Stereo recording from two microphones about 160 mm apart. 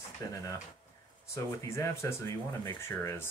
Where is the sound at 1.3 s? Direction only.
15° left (ahead or behind).